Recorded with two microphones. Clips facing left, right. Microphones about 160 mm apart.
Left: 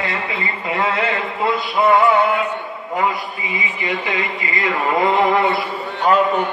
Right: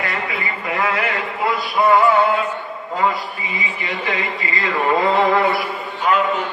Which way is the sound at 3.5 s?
20° left (ahead or behind).